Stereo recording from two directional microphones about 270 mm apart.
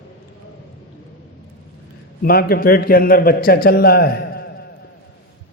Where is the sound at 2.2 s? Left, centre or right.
Left.